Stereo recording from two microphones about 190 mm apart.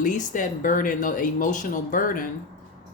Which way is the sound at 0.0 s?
45° left (ahead or behind).